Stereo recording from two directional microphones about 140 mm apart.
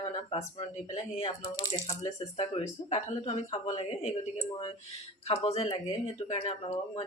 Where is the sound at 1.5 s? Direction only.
30° left (ahead or behind).